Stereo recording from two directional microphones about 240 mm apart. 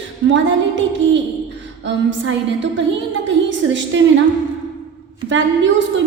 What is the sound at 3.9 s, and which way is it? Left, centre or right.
Speech, right.